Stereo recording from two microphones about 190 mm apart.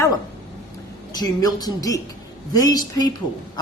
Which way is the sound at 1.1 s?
20° left (ahead or behind).